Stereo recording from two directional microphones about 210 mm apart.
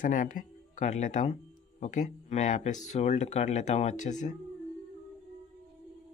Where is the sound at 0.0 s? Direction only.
40° left (ahead or behind).